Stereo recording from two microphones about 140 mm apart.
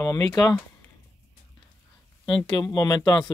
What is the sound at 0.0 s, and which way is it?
Speech, 25° left (ahead or behind).